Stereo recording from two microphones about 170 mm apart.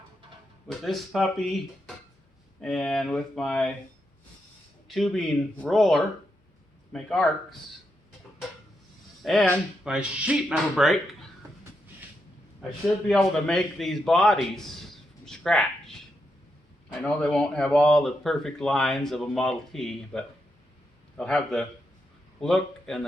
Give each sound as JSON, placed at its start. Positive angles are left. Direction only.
{"t": 0.7, "sound": "speech", "side_deg": 0}
{"t": 4.9, "sound": "speech", "side_deg": 0}
{"t": 9.2, "sound": "speech", "side_deg": 0}
{"t": 13.1, "sound": "a man's voice", "side_deg": 0}
{"t": 17.0, "sound": "a man's voice", "side_deg": 5}